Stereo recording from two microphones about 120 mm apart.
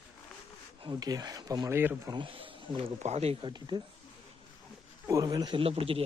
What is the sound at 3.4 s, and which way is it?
Speech, 40° right (ahead or behind).